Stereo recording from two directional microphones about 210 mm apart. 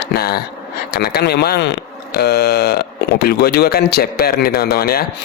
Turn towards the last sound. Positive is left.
turn(degrees=45)  # may be behind; listen again after turning